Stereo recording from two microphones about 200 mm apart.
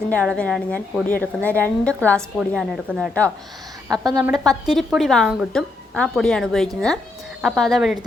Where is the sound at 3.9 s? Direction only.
20° right (ahead or behind).